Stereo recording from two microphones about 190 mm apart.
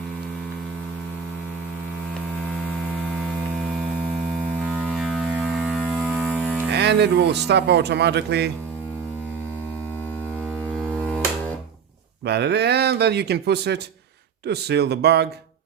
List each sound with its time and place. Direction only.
4.6 s music: 5° right (ahead or behind)
5.9 s a sound: centre (ahead or behind)
6.7 s speech: 60° right (ahead or behind)
12.2 s speech: 60° right (ahead or behind)